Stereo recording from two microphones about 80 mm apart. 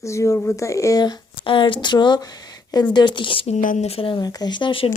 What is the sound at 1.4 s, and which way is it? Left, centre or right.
Speech, left.